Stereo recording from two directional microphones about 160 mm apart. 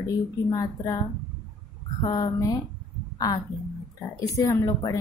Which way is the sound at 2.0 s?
25° left (ahead or behind).